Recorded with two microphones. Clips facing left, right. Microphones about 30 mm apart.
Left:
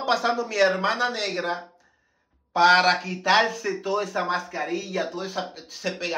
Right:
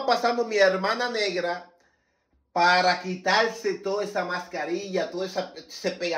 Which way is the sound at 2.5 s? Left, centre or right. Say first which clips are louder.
Left 3 dB; left.